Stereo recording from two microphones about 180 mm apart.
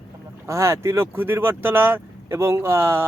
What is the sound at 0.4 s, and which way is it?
Speech, 15° right (ahead or behind).